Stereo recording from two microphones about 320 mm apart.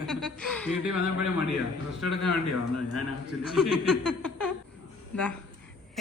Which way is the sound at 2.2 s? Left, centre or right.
Left.